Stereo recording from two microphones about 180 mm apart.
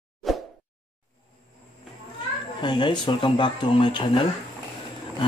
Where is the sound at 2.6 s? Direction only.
25° left (ahead or behind).